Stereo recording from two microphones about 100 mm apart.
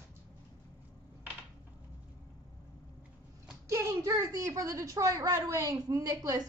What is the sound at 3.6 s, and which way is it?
A woman's voice, 30° right (ahead or behind).